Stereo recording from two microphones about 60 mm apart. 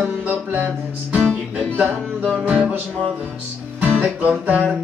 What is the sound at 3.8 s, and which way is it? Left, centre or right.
Music, right.